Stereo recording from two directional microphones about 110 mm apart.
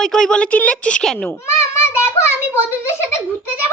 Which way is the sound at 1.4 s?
25° left (ahead or behind).